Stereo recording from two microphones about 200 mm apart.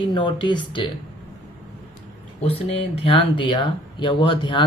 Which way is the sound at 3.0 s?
25° left (ahead or behind).